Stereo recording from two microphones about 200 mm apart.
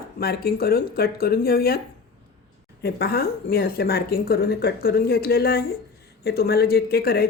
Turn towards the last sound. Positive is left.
turn(degrees=50)  # may be behind; listen again after turning